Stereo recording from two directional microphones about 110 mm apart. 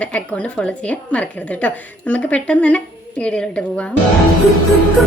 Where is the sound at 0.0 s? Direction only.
10° left (ahead or behind).